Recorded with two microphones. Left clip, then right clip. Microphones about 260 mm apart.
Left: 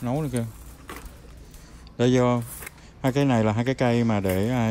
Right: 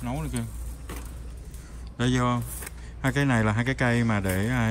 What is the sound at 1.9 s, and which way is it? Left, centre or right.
Speech, centre.